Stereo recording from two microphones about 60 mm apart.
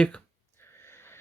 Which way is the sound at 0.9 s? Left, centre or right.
Left.